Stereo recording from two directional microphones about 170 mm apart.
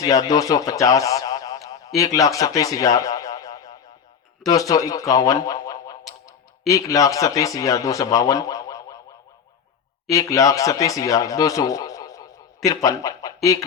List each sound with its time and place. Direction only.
0.0 s a sound: 20° left (ahead or behind)
2.0 s speech: 20° left (ahead or behind)
10.1 s speech: 20° left (ahead or behind)